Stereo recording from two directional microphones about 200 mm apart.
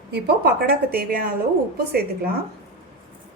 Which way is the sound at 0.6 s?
50° right (ahead or behind).